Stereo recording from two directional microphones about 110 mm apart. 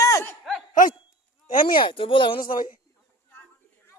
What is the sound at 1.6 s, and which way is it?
Speech, 50° left (ahead or behind).